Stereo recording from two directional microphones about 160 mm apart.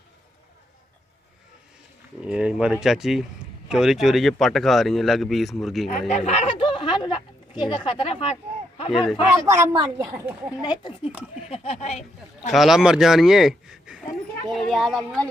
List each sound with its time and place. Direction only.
2.2 s speech: 5° right (ahead or behind)
5.9 s speech: 50° left (ahead or behind)
9.3 s a woman's voice: 15° right (ahead or behind)
10.6 s speech: 30° left (ahead or behind)
11.4 s speech: 40° left (ahead or behind)
12.4 s speech: centre (ahead or behind)